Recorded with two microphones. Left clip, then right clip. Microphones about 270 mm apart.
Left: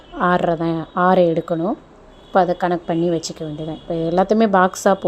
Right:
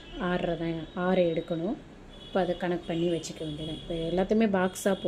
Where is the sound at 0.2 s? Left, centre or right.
Left.